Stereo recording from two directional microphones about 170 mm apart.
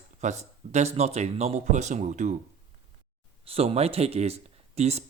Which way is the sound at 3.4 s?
35° right (ahead or behind).